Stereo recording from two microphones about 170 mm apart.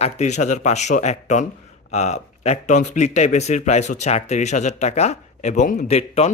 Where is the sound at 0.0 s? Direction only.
45° left (ahead or behind).